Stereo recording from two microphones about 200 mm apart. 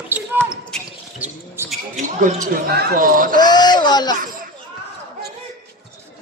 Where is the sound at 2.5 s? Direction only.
55° right (ahead or behind).